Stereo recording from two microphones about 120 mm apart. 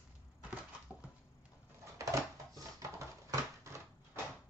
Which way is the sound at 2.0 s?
25° right (ahead or behind).